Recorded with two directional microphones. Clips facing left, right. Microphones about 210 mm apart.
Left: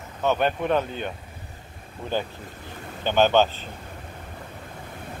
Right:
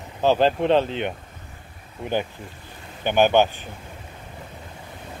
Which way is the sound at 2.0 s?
15° right (ahead or behind).